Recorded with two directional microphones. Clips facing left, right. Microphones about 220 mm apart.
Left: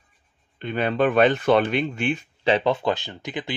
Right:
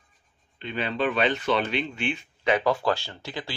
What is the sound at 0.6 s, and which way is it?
Speech, 50° left (ahead or behind).